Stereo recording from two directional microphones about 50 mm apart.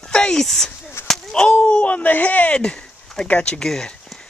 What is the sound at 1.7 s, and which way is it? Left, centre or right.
Speech, left.